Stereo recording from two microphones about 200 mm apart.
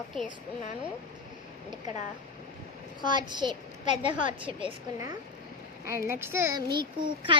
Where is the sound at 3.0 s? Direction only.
20° right (ahead or behind).